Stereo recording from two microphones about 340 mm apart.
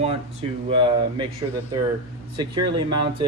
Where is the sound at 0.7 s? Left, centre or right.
Centre.